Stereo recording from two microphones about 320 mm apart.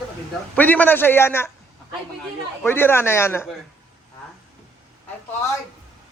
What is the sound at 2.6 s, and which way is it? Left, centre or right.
Speech, centre.